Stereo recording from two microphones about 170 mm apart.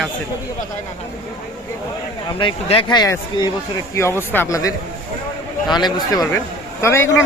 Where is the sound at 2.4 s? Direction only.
30° left (ahead or behind); by 7.2 s 15° left (ahead or behind).